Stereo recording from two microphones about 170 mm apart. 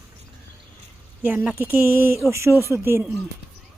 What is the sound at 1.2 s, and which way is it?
Speech, 10° right (ahead or behind).